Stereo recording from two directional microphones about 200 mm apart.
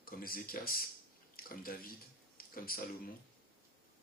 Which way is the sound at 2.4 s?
45° left (ahead or behind).